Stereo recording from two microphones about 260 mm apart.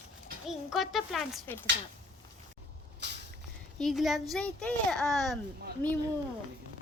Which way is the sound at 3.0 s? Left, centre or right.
Right.